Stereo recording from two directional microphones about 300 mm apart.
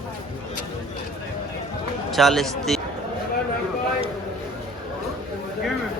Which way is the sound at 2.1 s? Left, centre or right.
Centre.